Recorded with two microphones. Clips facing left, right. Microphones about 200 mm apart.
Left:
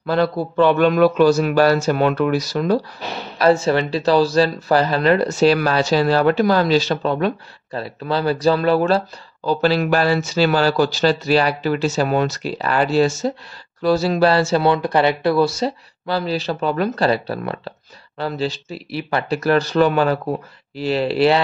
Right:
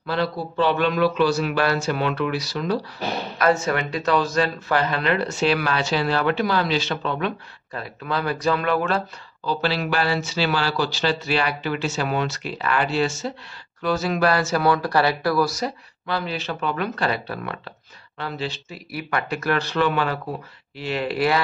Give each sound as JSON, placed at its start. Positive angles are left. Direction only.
{"t": 0.0, "sound": "a man's voice", "side_deg": 45}
{"t": 3.3, "sound": "speech", "side_deg": 30}
{"t": 9.5, "sound": "speech", "side_deg": 45}